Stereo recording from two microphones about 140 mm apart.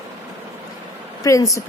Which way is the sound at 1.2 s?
25° left (ahead or behind).